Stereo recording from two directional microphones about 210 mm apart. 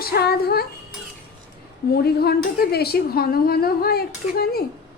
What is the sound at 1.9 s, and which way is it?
A woman's voice, 50° left (ahead or behind).